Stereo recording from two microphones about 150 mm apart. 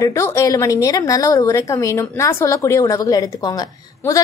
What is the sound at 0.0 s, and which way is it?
A woman's voice, 20° left (ahead or behind).